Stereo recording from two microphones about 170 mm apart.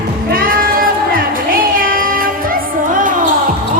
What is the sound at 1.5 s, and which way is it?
Child singing, 55° right (ahead or behind).